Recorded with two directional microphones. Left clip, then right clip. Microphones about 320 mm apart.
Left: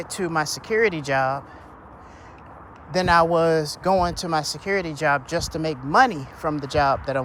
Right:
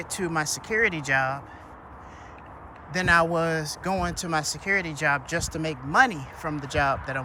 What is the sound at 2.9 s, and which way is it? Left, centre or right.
Speech, centre.